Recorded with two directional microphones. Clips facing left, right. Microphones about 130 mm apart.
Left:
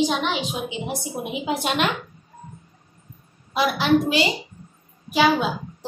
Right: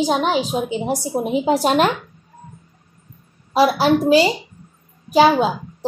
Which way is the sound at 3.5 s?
35° right (ahead or behind).